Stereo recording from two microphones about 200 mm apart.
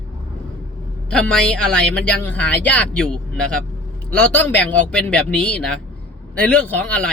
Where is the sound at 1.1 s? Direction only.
5° left (ahead or behind).